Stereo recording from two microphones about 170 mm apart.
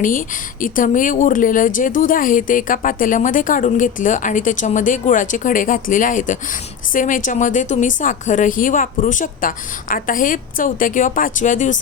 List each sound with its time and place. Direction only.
0.0 s a woman's voice: 55° left (ahead or behind)